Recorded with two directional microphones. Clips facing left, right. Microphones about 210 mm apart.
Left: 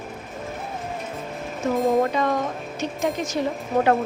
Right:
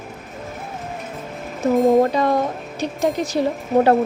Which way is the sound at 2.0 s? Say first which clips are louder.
Right 4 dB; 35° right (ahead or behind).